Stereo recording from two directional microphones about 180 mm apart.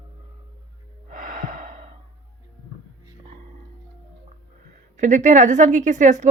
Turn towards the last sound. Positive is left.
turn(degrees=-40)  # may be behind; listen again after turning